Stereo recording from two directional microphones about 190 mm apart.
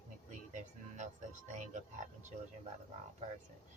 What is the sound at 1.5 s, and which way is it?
Speech, 40° right (ahead or behind).